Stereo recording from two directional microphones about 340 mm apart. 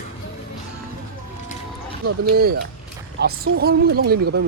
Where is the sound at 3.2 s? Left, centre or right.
Right.